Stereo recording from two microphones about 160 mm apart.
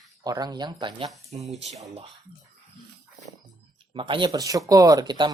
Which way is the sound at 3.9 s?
30° right (ahead or behind).